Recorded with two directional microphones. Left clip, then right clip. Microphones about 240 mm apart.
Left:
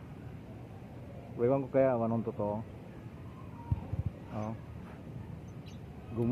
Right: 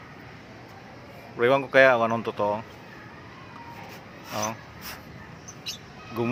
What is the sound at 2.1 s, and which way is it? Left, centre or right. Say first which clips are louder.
Speech: right 9 dB; right.